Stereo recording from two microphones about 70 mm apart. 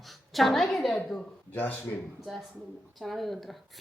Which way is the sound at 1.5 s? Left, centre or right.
Left.